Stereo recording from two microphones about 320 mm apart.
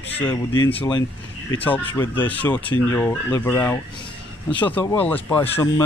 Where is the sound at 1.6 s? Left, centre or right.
Centre.